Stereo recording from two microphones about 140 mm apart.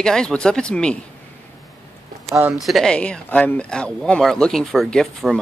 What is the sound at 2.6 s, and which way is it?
Speech, centre (ahead or behind).